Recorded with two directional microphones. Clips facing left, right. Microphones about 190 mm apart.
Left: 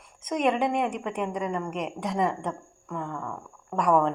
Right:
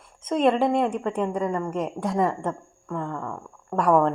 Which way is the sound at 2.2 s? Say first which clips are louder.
Right 2 dB; 15° left (ahead or behind).